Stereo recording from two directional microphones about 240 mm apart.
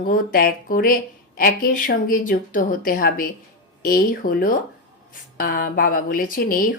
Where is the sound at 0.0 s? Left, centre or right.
Left.